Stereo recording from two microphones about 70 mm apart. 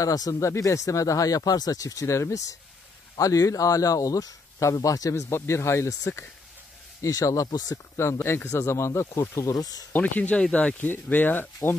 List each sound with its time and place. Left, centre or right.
0.0 s speech: left
5.1 s speech: left
7.9 s speech: left
9.5 s speech: left
9.9 s speech: left